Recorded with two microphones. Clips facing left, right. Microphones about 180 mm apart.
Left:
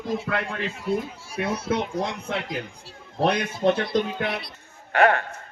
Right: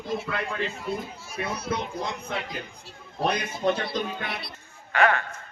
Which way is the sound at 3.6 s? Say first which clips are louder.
Left 4 dB; 70° left (ahead or behind).